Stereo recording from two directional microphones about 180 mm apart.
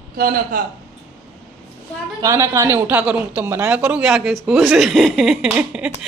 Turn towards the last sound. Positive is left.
turn(degrees=-5)  # may be behind; listen again after turning